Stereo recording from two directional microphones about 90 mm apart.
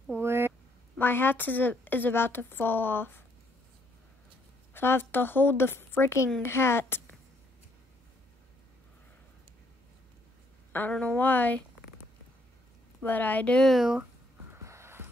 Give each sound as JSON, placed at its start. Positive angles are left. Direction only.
{"t": 0.1, "sound": "a sound", "side_deg": -30}
{"t": 0.5, "sound": "a woman's voice", "side_deg": 25}
{"t": 4.7, "sound": "a woman's voice", "side_deg": 25}
{"t": 10.9, "sound": "a woman's voice", "side_deg": 15}
{"t": 13.0, "sound": "a woman's voice", "side_deg": 20}
{"t": 13.7, "sound": "speech", "side_deg": -5}
{"t": 14.5, "sound": "a sound", "side_deg": -30}